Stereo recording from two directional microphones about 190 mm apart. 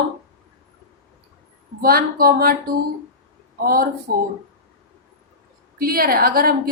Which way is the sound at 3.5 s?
50° right (ahead or behind).